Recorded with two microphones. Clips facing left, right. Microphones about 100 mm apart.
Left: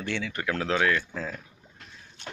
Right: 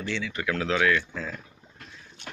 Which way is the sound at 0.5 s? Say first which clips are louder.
Right 1 dB; 35° left (ahead or behind).